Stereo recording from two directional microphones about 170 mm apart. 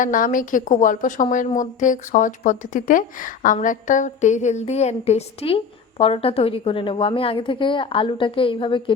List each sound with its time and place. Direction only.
0.0 s a woman's voice: 50° left (ahead or behind); by 8.8 s 30° left (ahead or behind)